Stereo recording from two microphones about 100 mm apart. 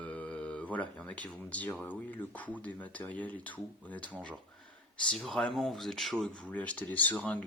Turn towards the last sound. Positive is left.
turn(degrees=15)  # may be behind; listen again after turning